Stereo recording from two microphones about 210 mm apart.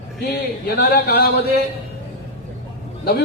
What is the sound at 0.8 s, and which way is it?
Speech, 45° left (ahead or behind).